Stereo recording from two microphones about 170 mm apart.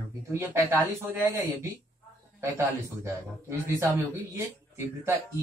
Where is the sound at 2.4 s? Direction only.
15° right (ahead or behind).